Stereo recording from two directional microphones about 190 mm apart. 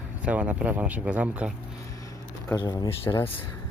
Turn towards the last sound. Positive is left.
turn(degrees=15)  # may be behind; listen again after turning